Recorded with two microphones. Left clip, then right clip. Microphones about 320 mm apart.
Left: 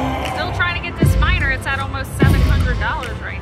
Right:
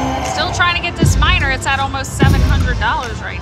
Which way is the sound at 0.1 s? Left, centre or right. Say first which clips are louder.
Right 4 dB; centre.